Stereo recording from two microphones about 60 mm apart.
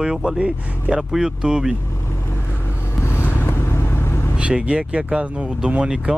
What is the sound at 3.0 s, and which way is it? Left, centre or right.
Vehicle, left.